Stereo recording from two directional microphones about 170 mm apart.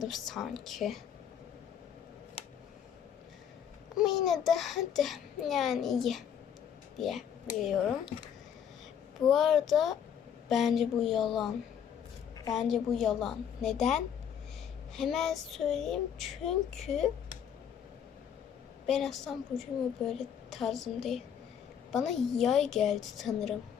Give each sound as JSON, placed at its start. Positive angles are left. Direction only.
{"t": 0.0, "sound": "a child's voice", "side_deg": 0}
{"t": 2.4, "sound": "a sound", "side_deg": 40}
{"t": 3.9, "sound": "a child's voice", "side_deg": 0}
{"t": 9.3, "sound": "a child's voice", "side_deg": 0}
{"t": 12.5, "sound": "a child's voice", "side_deg": 0}
{"t": 18.9, "sound": "a child's voice", "side_deg": 0}